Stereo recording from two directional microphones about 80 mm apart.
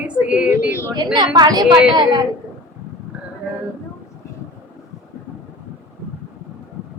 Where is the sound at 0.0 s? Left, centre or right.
Centre.